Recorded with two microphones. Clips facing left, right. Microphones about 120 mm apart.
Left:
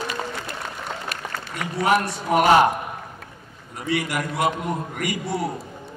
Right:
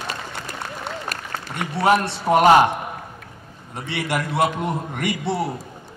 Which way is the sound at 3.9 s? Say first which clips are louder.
Even; 25° right (ahead or behind).